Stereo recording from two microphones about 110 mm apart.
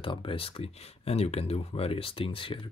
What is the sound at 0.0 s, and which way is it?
Speech, 50° left (ahead or behind).